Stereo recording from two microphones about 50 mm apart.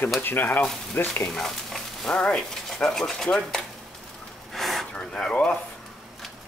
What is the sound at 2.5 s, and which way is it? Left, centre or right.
Speech, centre.